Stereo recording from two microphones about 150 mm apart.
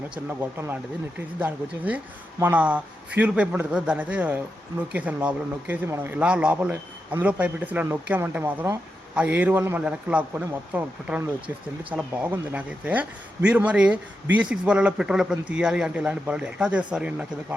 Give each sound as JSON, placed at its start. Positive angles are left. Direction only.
{"t": 1.4, "sound": "speech", "side_deg": -10}